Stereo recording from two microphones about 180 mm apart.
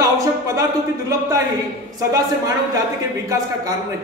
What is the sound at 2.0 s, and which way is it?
Speech, 20° right (ahead or behind).